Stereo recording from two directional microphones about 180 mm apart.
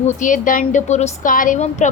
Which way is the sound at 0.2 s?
45° left (ahead or behind).